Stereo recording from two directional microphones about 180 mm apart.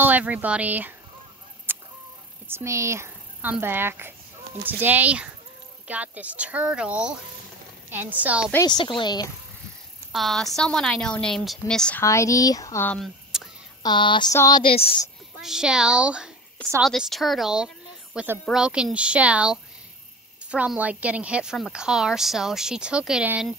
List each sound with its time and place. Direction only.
0.0 s a woman's voice: 10° right (ahead or behind)
1.7 s chicken: 10° right (ahead or behind)
2.4 s a woman's voice: 15° right (ahead or behind)
8.6 s a sound: 25° left (ahead or behind)
10.1 s a woman's voice: centre (ahead or behind)
12.0 s speech: 15° left (ahead or behind); by 13.5 s centre (ahead or behind)
13.8 s a sound: 25° left (ahead or behind)
14.6 s a woman's voice: 30° left (ahead or behind)
15.4 s a woman's voice: 5° right (ahead or behind)